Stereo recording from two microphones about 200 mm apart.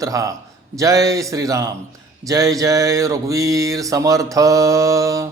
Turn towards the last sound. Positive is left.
turn(degrees=-15)  # may be behind; listen again after turning